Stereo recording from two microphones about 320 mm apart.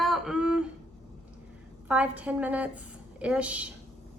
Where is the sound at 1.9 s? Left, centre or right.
Centre.